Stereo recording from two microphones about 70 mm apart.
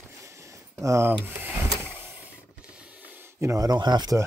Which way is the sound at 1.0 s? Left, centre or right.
Right.